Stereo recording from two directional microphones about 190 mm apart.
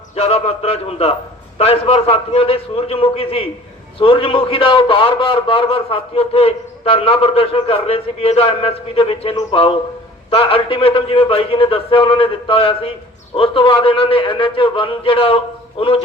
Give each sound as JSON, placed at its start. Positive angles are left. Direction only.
{"t": 0.2, "sound": "a man's voice", "side_deg": 30}